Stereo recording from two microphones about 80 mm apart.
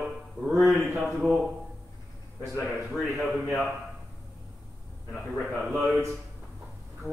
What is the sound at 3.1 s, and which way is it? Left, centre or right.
Speech, centre.